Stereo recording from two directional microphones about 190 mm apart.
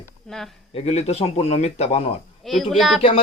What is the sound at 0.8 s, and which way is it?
Speech, 35° left (ahead or behind).